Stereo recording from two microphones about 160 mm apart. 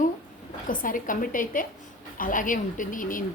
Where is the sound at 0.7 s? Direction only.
55° left (ahead or behind).